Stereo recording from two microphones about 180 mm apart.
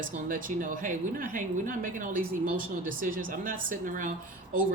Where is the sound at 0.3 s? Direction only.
50° right (ahead or behind).